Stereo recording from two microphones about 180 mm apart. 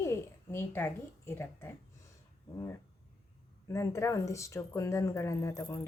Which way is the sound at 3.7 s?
15° left (ahead or behind).